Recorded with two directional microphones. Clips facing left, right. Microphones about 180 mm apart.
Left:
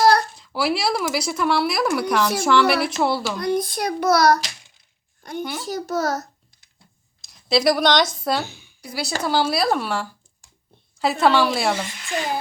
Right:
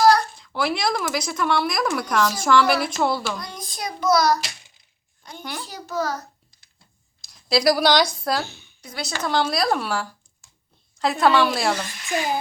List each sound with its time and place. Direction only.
0.3 s speech: 5° left (ahead or behind)
3.3 s a child's voice: 60° left (ahead or behind)
5.4 s speech: centre (ahead or behind)
5.6 s a child's voice: 45° left (ahead or behind)
7.3 s speech: centre (ahead or behind)
8.4 s a woman's voice: 10° left (ahead or behind)